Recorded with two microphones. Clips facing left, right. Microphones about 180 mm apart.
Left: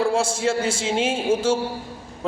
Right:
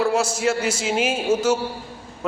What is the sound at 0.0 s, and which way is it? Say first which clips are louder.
A man's voice: right 1 dB; 30° left (ahead or behind).